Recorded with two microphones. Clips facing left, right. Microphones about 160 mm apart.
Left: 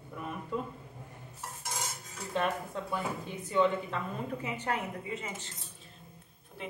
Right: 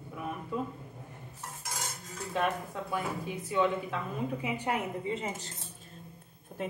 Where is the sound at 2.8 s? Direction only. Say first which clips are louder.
Right 3 dB; 5° right (ahead or behind).